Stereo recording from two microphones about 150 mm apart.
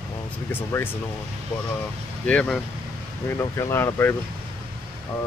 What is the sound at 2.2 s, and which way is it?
Speech, 10° left (ahead or behind).